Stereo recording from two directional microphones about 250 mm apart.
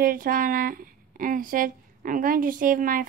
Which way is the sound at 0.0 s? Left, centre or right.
Right.